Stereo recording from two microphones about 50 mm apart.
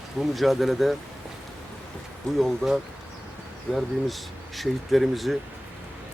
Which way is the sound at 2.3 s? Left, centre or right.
Centre.